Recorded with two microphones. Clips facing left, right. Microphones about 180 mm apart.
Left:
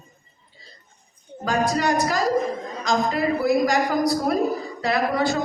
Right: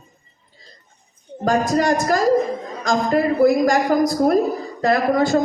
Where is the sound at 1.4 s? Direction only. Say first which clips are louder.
Right 4 dB; 45° right (ahead or behind).